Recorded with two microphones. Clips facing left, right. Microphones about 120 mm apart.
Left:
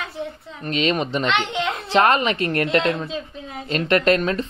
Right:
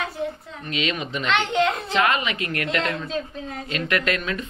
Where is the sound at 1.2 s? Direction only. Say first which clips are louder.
Right 1 dB; centre (ahead or behind).